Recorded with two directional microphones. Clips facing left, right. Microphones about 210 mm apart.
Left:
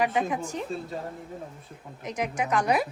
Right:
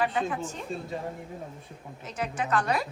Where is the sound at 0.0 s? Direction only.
15° left (ahead or behind).